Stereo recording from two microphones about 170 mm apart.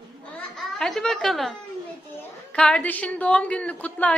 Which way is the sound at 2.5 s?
5° left (ahead or behind).